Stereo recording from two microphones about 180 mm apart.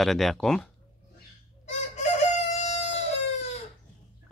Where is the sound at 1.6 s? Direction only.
40° left (ahead or behind).